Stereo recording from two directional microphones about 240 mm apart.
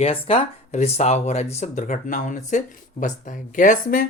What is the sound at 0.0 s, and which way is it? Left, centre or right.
Speech, left.